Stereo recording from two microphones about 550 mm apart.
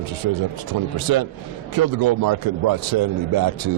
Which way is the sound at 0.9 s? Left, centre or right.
Right.